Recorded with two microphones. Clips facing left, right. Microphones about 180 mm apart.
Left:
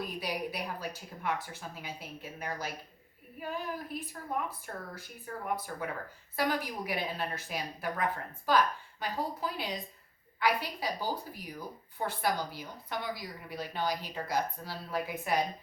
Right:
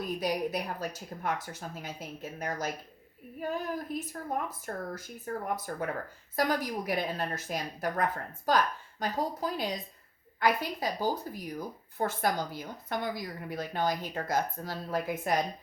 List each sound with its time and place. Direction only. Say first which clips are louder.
0.0 s speech: right 5 dB; 45° right (ahead or behind)
3.9 s speech: right 2 dB; 45° right (ahead or behind)